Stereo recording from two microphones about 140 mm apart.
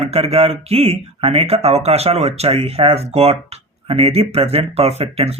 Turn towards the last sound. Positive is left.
turn(degrees=-45)  # may be behind; listen again after turning